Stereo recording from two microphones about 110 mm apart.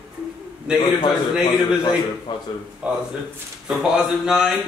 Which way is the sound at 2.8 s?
10° right (ahead or behind).